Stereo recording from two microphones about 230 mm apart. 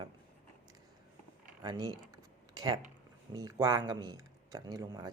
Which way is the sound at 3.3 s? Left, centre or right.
Centre.